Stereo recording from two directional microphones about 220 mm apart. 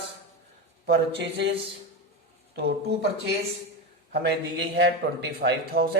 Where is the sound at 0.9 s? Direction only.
50° right (ahead or behind).